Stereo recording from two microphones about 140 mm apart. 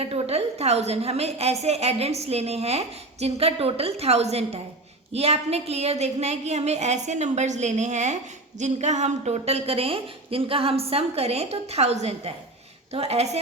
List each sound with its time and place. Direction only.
0.0 s a woman's voice: 45° right (ahead or behind)